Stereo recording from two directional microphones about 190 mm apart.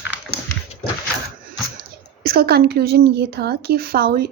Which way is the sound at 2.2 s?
50° right (ahead or behind).